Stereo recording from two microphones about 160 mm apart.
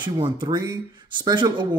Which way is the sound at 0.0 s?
30° right (ahead or behind).